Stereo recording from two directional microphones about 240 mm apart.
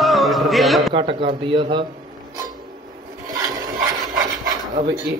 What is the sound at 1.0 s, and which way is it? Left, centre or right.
Speech, right.